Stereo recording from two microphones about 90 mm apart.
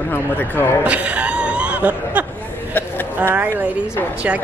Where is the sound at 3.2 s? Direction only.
20° right (ahead or behind).